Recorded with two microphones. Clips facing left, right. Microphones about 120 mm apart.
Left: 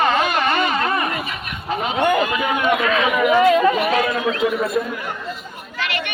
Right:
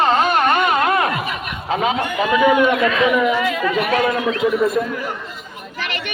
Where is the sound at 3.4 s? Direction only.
35° left (ahead or behind).